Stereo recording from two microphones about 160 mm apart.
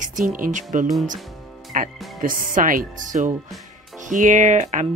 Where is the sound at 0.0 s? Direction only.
55° right (ahead or behind).